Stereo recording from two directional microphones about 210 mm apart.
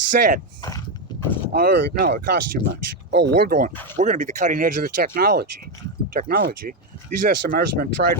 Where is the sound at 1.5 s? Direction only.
50° right (ahead or behind).